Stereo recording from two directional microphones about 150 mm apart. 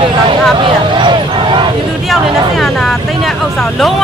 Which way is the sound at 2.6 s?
Centre (ahead or behind).